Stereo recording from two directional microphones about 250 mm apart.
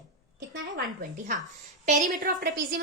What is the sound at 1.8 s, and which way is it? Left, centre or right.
Speech, right.